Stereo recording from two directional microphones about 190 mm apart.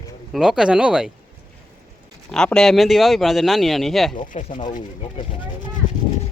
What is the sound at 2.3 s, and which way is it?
Speech, 5° left (ahead or behind).